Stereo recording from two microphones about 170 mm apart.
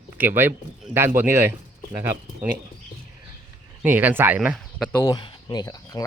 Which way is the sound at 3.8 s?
10° right (ahead or behind).